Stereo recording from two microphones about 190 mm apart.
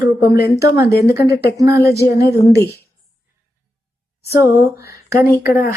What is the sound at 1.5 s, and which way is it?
Speech, 15° right (ahead or behind).